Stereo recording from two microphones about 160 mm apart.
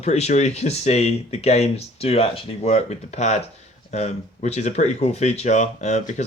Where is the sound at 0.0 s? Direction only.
45° left (ahead or behind).